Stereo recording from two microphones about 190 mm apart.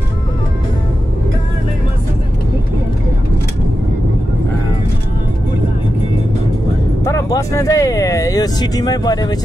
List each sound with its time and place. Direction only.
7.1 s speech: 15° left (ahead or behind)